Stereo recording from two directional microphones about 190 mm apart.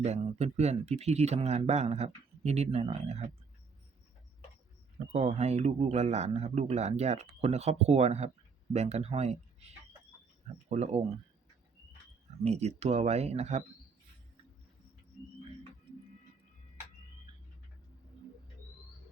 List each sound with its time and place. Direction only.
0.0 s speech: 35° right (ahead or behind)
5.1 s speech: 35° right (ahead or behind)
12.4 s speech: 35° right (ahead or behind)